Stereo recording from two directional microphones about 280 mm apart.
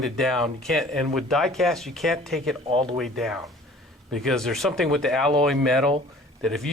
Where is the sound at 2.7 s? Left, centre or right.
Centre.